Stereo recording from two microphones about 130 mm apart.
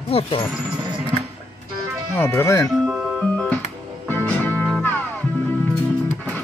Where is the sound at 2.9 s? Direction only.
Centre (ahead or behind).